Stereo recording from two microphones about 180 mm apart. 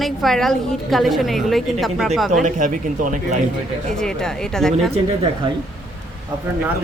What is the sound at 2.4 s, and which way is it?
Speech, 45° right (ahead or behind).